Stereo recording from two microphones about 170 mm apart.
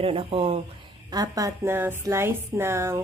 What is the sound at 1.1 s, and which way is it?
A woman's voice, 20° right (ahead or behind).